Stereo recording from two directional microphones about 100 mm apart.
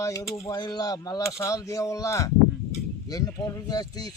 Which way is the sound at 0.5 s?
45° left (ahead or behind).